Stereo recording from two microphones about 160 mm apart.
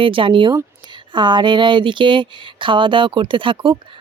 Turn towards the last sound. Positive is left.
turn(degrees=-30)  # may be behind; listen again after turning